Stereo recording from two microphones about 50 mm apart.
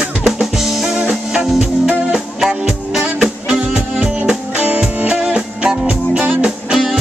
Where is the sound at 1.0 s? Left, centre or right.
Centre.